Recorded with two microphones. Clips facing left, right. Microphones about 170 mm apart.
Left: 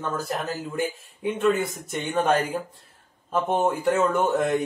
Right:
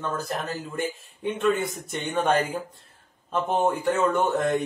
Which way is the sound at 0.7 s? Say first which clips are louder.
Left 2 dB; centre (ahead or behind).